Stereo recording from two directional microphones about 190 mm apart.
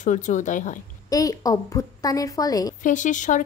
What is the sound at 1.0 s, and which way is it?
A woman's voice, 20° left (ahead or behind).